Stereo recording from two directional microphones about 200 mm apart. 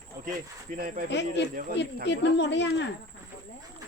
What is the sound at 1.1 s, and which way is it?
Speech, 60° left (ahead or behind).